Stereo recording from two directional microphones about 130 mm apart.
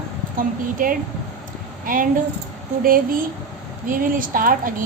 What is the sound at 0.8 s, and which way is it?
A woman's voice, 90° right.